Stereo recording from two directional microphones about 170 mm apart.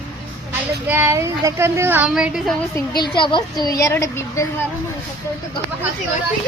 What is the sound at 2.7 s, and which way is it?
A woman's voice, 25° left (ahead or behind).